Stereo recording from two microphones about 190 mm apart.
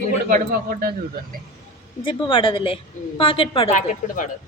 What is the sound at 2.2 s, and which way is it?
A woman's voice, 25° left (ahead or behind).